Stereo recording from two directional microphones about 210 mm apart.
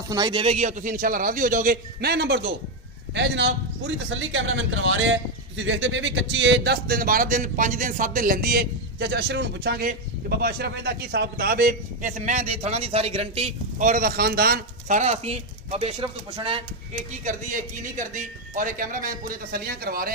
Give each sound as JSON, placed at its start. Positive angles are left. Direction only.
{"t": 0.1, "sound": "a man's voice", "side_deg": -20}
{"t": 17.2, "sound": "a man's voice", "side_deg": -35}